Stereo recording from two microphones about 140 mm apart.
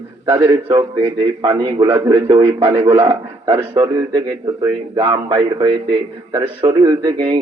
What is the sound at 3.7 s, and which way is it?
A man's voice, 30° right (ahead or behind).